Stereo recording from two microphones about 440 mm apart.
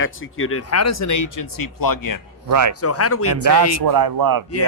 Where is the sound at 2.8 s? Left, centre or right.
Left.